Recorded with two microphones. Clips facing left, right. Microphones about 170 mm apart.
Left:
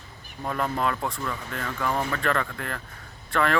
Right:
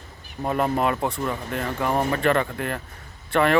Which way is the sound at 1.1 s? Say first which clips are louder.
Right 5 dB; 30° right (ahead or behind).